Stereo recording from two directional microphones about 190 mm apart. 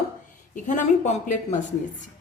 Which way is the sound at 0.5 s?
40° left (ahead or behind).